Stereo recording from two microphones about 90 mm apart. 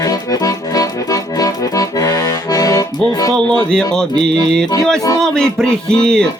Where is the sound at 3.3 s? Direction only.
60° right (ahead or behind).